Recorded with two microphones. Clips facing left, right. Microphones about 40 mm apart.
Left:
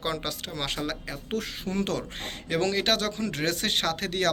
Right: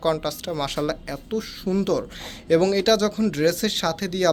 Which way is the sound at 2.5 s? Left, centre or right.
Left.